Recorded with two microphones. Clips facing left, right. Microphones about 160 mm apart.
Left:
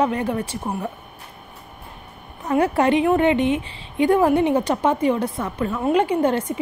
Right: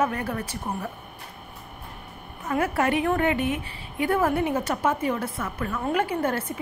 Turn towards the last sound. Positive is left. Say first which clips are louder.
# left 6 dB
turn(degrees=20)  # may be behind; listen again after turning